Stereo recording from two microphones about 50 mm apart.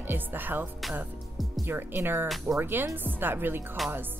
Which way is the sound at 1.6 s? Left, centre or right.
Right.